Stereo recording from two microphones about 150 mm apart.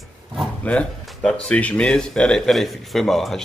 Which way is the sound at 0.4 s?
5° left (ahead or behind).